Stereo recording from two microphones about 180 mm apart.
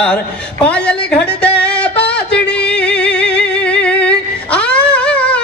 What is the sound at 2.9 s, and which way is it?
Music, 5° left (ahead or behind).